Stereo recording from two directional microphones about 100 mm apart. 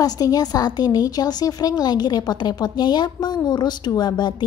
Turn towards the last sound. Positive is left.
turn(degrees=45)  # may be behind; listen again after turning